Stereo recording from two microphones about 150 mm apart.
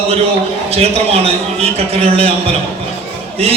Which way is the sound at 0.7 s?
40° right (ahead or behind).